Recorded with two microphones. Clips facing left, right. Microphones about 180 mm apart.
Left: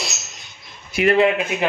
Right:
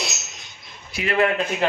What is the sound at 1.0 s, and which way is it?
Speech, 70° left (ahead or behind).